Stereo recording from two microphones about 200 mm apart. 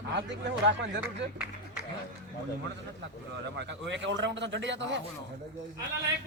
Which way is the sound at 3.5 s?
60° right (ahead or behind).